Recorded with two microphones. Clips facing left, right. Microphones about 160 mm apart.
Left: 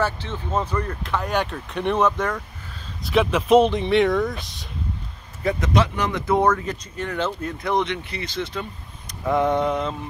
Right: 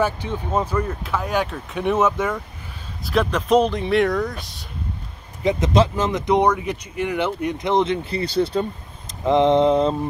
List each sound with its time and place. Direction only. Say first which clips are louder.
0.0 s speech: right 3 dB; 10° right (ahead or behind)
5.4 s speech: right 3 dB; 20° right (ahead or behind)